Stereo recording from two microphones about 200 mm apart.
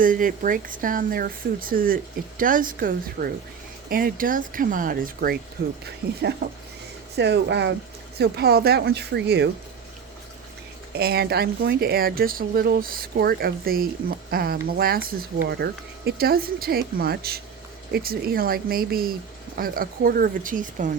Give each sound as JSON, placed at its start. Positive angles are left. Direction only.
{"t": 0.0, "sound": "speech", "side_deg": -40}
{"t": 10.9, "sound": "speech", "side_deg": -50}